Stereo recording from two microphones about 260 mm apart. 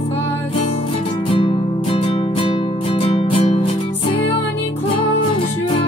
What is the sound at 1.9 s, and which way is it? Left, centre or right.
Music, left.